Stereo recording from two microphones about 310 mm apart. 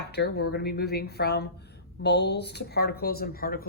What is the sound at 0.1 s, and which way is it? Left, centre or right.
Speech, left.